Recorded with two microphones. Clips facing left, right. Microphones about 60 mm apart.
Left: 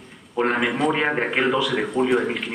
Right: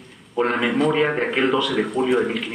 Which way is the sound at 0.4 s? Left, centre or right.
Centre.